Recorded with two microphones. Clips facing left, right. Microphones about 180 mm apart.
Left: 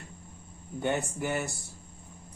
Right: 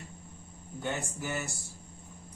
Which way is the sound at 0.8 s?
60° left (ahead or behind).